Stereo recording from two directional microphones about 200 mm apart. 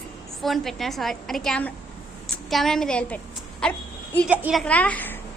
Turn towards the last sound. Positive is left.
turn(degrees=10)  # may be behind; listen again after turning